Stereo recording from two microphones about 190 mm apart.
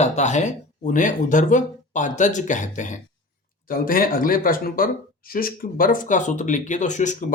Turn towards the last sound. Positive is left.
turn(degrees=40)  # may be behind; listen again after turning